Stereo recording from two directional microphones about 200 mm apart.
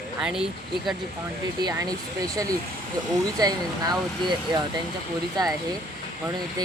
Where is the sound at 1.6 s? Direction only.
20° right (ahead or behind).